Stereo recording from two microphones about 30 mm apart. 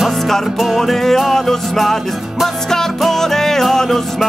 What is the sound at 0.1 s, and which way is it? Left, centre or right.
Music, centre.